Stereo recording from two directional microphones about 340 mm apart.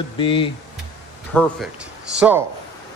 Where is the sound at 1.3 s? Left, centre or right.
Centre.